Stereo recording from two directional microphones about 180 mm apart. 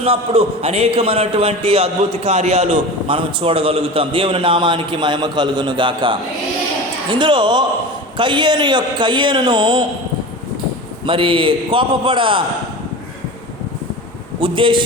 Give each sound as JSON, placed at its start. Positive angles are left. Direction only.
{"t": 0.0, "sound": "a man's voice", "side_deg": -30}
{"t": 11.0, "sound": "a man's voice", "side_deg": -30}
{"t": 14.4, "sound": "a man's voice", "side_deg": -30}